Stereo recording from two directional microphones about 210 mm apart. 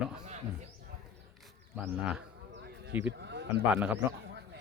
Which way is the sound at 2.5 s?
50° right (ahead or behind).